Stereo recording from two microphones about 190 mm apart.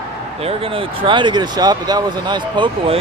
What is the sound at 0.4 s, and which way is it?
Speech, 30° right (ahead or behind).